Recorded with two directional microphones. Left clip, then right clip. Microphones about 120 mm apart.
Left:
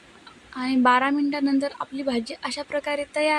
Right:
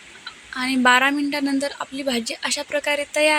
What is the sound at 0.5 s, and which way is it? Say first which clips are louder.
Speech: right 3 dB; 15° right (ahead or behind).